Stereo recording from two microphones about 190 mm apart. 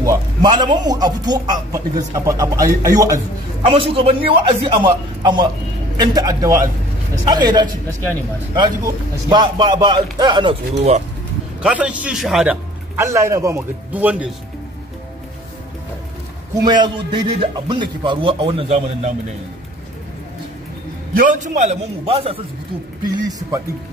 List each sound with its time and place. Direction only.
0.0 s a man's voice: 20° right (ahead or behind)
3.6 s a man's voice: 30° right (ahead or behind)
11.6 s a man's voice: 5° right (ahead or behind)
12.9 s a man's voice: 15° right (ahead or behind)
16.6 s a man's voice: 25° right (ahead or behind)
21.2 s a man's voice: 40° right (ahead or behind); by 23.6 s 20° right (ahead or behind)